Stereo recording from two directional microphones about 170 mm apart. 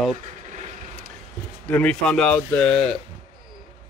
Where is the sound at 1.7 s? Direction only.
10° left (ahead or behind).